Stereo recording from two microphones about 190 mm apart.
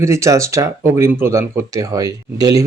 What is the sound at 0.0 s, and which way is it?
Speech, 15° right (ahead or behind).